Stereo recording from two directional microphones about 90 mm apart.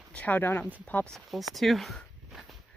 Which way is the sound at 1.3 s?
Centre (ahead or behind).